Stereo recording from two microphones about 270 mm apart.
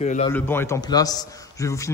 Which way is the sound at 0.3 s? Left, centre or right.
Centre.